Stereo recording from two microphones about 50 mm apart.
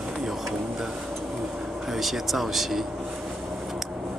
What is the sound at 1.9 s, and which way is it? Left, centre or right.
Speech, centre.